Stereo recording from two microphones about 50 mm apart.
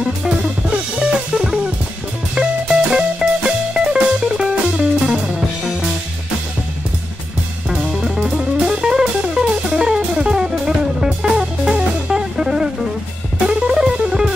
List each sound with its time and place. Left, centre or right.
0.9 s music: centre
7.7 s music: centre